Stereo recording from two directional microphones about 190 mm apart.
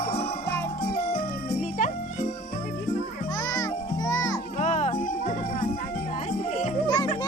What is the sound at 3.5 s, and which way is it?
Music, 20° left (ahead or behind).